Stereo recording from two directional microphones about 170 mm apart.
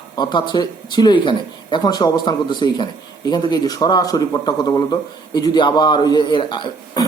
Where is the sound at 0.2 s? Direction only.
25° left (ahead or behind).